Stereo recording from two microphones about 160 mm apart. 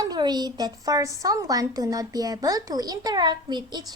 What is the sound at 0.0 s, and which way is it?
A woman's voice, 25° right (ahead or behind).